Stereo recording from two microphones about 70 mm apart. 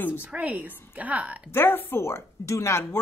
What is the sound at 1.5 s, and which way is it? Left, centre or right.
Speech, left.